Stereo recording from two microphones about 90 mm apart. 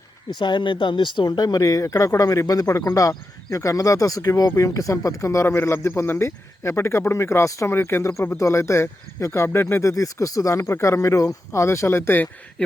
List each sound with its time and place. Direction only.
0.3 s speech: 55° left (ahead or behind); by 9.9 s 30° left (ahead or behind)
9.9 s speech: 40° left (ahead or behind); by 12.3 s 25° left (ahead or behind)
12.6 s a sound: 15° left (ahead or behind)